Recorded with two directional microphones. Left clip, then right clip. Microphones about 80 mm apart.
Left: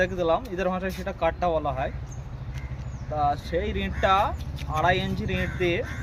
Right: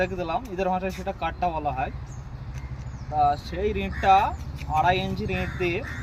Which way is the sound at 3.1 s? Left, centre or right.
Left.